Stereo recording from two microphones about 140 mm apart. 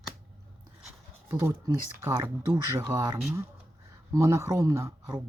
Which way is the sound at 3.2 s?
15° right (ahead or behind).